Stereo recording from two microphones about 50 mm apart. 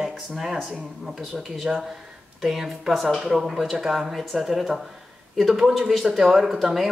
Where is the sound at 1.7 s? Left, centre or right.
Centre.